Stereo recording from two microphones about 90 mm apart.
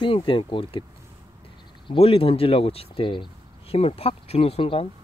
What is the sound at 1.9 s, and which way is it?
Speech, 90° left.